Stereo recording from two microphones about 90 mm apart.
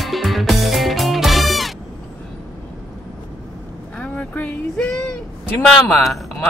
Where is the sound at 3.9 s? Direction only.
15° left (ahead or behind).